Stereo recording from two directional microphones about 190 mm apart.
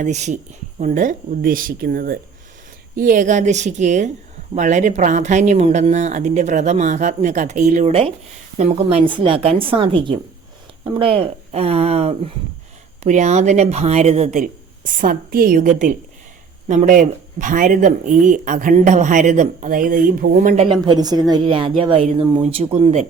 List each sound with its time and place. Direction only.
0.0 s a woman's voice: 40° right (ahead or behind)
20.8 s a woman's voice: 20° right (ahead or behind)